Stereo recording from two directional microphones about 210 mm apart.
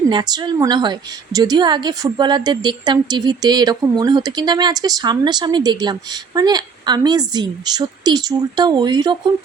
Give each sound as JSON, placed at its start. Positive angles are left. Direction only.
{"t": 0.1, "sound": "a woman's voice", "side_deg": -20}